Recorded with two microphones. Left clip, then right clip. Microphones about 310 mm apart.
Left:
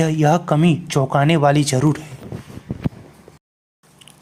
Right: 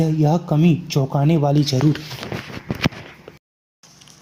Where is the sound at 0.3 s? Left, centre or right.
Left.